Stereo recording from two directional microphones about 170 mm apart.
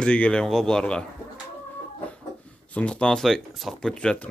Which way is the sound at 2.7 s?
5° left (ahead or behind).